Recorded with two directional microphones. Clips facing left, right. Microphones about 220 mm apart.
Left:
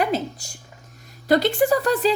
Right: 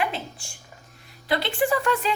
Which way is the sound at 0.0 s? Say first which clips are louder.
Left 6 dB; 40° left (ahead or behind).